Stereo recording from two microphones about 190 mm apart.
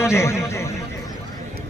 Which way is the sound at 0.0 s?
15° left (ahead or behind).